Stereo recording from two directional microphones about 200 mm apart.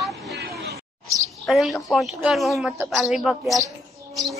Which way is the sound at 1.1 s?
Centre (ahead or behind).